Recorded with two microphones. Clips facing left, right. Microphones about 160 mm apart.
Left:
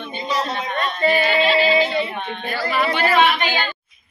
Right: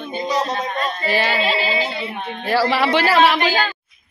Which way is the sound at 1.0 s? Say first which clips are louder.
Left 3 dB; 90° right.